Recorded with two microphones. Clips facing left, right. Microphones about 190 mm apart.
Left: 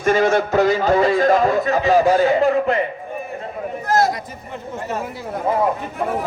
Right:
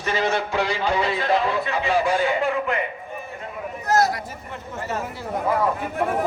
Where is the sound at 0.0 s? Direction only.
50° left (ahead or behind).